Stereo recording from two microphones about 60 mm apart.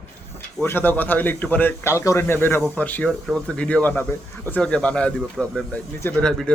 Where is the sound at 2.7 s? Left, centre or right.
Left.